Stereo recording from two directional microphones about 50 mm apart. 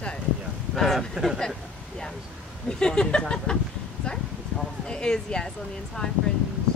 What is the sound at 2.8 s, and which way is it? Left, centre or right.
Speech, centre.